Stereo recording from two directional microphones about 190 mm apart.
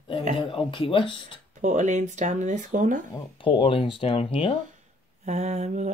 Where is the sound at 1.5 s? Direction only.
40° right (ahead or behind).